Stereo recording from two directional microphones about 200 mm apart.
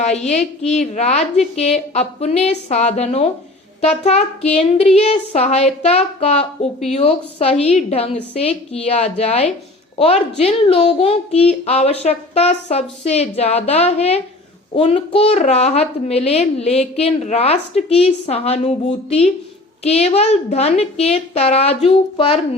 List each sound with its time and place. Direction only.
0.0 s speech: 35° left (ahead or behind)